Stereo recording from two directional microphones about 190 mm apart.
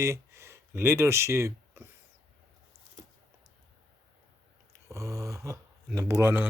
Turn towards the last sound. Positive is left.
turn(degrees=-10)  # may be behind; listen again after turning